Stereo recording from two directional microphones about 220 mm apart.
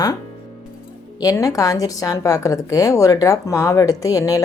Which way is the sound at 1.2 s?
15° left (ahead or behind).